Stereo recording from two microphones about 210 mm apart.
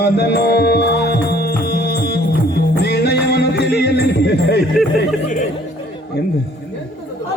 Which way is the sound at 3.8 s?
50° left (ahead or behind).